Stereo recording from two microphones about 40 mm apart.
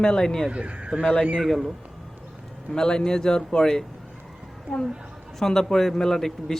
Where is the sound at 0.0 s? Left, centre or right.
Centre.